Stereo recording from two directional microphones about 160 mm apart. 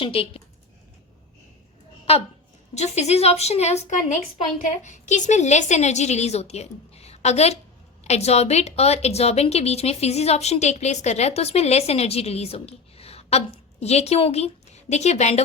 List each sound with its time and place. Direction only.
0.0 s a woman's voice: 35° left (ahead or behind)
2.7 s a woman's voice: 45° left (ahead or behind)